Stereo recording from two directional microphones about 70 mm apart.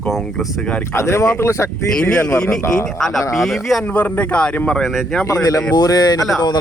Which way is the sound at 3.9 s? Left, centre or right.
Left.